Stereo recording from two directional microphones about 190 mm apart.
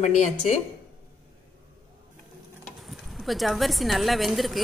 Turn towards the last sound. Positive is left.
turn(degrees=0)  # may be behind; listen again after turning